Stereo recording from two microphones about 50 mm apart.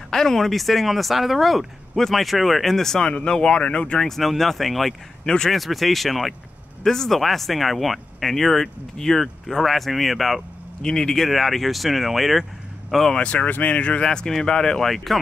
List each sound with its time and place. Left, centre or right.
0.1 s speech: centre
4.0 s speech: centre
5.2 s speech: centre
5.5 s speech: centre
10.8 s speech: centre
11.2 s speech: centre
13.2 s speech: left
14.0 s speech: centre